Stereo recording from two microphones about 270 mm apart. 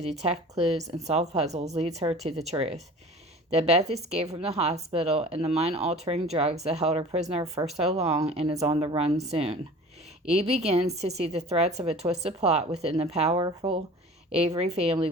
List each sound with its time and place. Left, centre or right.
0.0 s speech: right